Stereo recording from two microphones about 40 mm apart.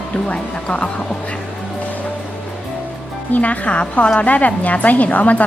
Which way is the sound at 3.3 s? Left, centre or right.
Left.